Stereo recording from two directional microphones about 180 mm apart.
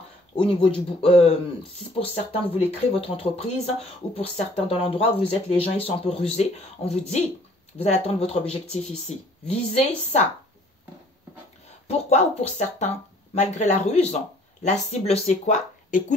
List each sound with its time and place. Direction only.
0.4 s speech: 30° left (ahead or behind)
11.9 s speech: 35° left (ahead or behind)